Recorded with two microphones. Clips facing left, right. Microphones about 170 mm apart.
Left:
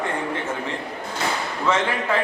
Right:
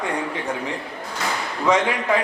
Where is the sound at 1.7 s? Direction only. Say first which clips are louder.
Right 3 dB; 15° right (ahead or behind).